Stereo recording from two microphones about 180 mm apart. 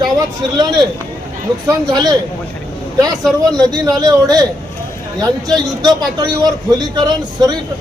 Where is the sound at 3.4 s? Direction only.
20° right (ahead or behind).